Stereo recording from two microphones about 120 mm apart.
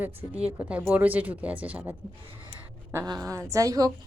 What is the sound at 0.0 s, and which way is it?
Speech, 15° right (ahead or behind).